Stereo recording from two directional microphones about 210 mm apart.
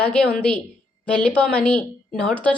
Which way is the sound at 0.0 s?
5° left (ahead or behind).